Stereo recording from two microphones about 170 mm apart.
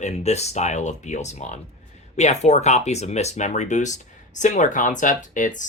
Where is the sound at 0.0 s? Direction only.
40° left (ahead or behind).